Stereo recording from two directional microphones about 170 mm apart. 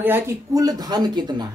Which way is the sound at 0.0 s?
15° right (ahead or behind).